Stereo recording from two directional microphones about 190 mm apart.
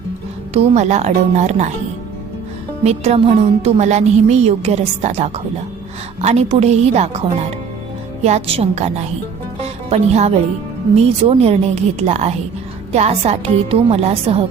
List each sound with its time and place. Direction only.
0.5 s speech: 35° right (ahead or behind)
2.8 s speech: 35° right (ahead or behind)
9.6 s music: 35° right (ahead or behind)
10.9 s speech: 30° right (ahead or behind)